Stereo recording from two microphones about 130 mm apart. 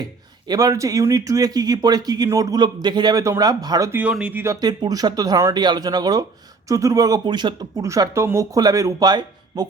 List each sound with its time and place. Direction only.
0.0 s speech: 30° right (ahead or behind)
3.9 s speech: 10° right (ahead or behind)
4.6 s speech: 30° right (ahead or behind)